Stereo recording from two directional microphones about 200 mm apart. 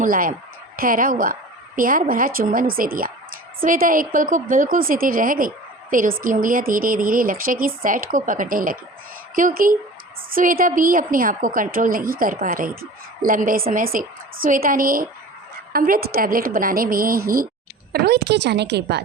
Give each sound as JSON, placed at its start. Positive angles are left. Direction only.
{"t": 0.0, "sound": "a woman's voice", "side_deg": -45}